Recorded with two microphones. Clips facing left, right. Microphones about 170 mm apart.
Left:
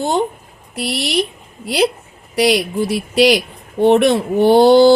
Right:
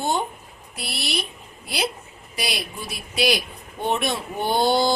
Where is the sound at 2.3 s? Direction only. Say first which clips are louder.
Left 15 dB; 70° left (ahead or behind).